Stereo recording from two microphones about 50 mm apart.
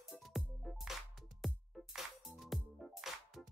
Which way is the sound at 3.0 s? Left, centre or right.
Centre.